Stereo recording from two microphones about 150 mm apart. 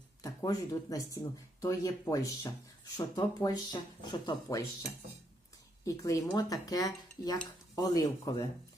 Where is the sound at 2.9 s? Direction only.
30° left (ahead or behind).